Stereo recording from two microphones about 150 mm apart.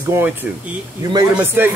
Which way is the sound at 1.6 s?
15° right (ahead or behind).